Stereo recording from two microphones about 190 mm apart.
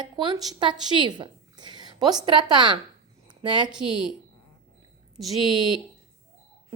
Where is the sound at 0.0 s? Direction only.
25° right (ahead or behind).